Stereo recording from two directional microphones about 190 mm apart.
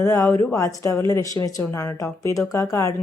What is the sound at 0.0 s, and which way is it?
Speech, 15° left (ahead or behind).